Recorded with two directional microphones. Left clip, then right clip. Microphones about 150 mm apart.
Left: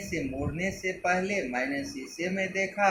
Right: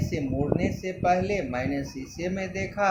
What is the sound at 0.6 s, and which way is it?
Speech, 75° right (ahead or behind).